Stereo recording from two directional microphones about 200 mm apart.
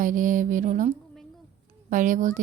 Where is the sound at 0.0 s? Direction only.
40° right (ahead or behind).